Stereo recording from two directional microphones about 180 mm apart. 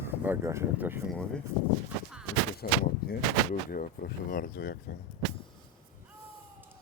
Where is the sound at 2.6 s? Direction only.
55° left (ahead or behind).